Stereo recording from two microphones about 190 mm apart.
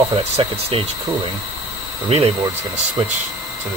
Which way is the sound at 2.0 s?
30° right (ahead or behind).